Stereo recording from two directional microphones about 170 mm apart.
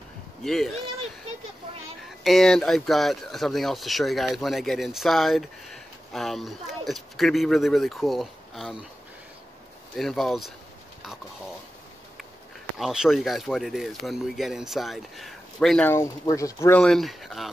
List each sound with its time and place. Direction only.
0.4 s speech: centre (ahead or behind)
2.0 s speech: centre (ahead or behind)
9.9 s speech: centre (ahead or behind)
12.7 s speech: centre (ahead or behind)
15.9 s speech: 15° left (ahead or behind)
16.8 s speech: centre (ahead or behind)